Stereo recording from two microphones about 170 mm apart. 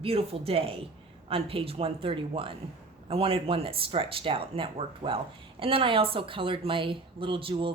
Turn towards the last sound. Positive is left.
turn(degrees=-30)  # may be behind; listen again after turning